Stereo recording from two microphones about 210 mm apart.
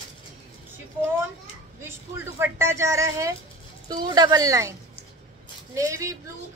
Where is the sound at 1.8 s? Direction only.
10° right (ahead or behind).